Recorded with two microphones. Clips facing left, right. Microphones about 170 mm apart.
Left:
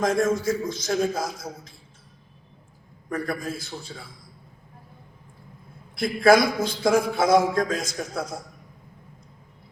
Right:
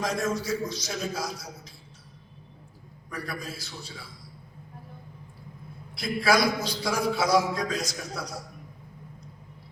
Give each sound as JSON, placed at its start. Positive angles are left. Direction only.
{"t": 0.0, "sound": "a man's voice", "side_deg": 50}
{"t": 3.1, "sound": "a man's voice", "side_deg": 50}
{"t": 6.0, "sound": "a man's voice", "side_deg": 50}